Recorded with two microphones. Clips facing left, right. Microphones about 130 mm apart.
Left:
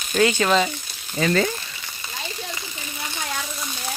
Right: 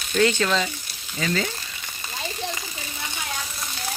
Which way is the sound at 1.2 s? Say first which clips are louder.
Left 5 dB; 45° left (ahead or behind).